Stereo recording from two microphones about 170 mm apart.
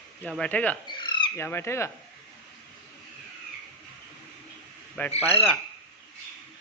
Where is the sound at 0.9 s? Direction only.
25° left (ahead or behind).